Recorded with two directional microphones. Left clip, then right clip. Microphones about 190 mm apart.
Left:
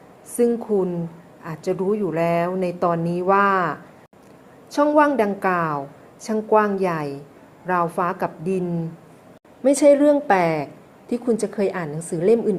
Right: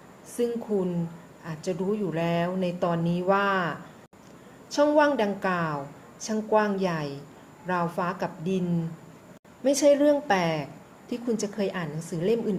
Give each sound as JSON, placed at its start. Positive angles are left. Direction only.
{"t": 0.3, "sound": "a woman's voice", "side_deg": 20}
{"t": 9.6, "sound": "a woman's voice", "side_deg": 15}